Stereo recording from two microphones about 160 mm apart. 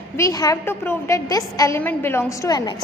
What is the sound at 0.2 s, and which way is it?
A woman's voice, 20° left (ahead or behind).